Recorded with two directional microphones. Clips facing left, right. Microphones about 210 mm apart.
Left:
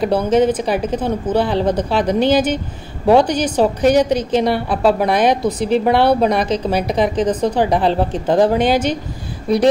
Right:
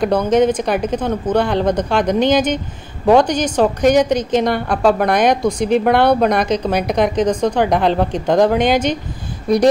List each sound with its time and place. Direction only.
0.0 s a woman's voice: 5° left (ahead or behind)